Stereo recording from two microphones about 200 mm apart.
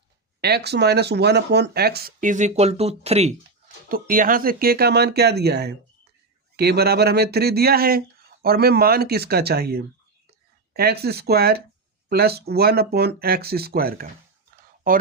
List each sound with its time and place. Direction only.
0.4 s speech: 55° right (ahead or behind); by 3.3 s 30° right (ahead or behind)
3.8 s speech: 45° right (ahead or behind)